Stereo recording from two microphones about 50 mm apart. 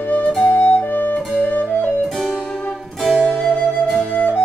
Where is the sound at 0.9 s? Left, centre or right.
Left.